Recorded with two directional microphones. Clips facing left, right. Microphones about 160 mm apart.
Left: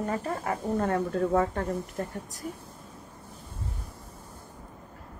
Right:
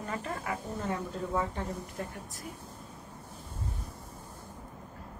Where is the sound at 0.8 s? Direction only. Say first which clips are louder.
Left 10 dB; 60° left (ahead or behind).